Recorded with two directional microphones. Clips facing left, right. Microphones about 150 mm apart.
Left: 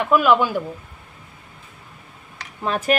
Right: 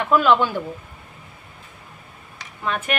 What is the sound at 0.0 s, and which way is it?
Speech, 10° left (ahead or behind).